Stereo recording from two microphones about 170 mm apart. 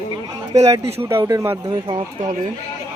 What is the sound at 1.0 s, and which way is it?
Speech, 15° right (ahead or behind).